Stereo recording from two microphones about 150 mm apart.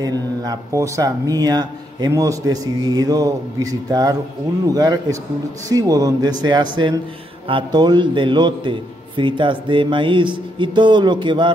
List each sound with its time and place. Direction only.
0.0 s a man's voice: 25° right (ahead or behind)